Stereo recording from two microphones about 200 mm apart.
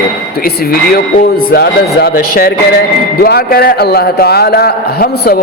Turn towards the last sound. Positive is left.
turn(degrees=50)  # may be behind; listen again after turning